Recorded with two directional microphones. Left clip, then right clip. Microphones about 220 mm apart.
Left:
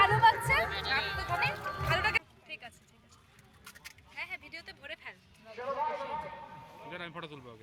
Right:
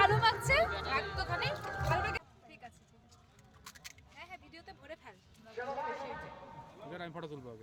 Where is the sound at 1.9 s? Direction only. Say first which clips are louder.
Left 6 dB; 25° right (ahead or behind).